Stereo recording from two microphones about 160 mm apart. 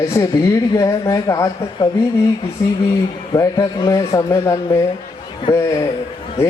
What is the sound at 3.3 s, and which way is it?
Speech, 25° left (ahead or behind).